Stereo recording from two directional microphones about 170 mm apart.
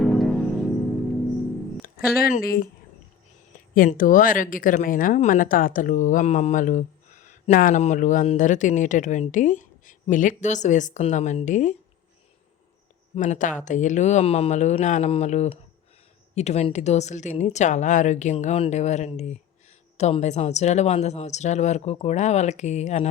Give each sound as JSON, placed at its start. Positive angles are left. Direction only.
{"t": 0.0, "sound": "music", "side_deg": 0}
{"t": 1.8, "sound": "speech", "side_deg": 60}
{"t": 3.8, "sound": "speech", "side_deg": 50}
{"t": 13.1, "sound": "a woman's voice", "side_deg": 45}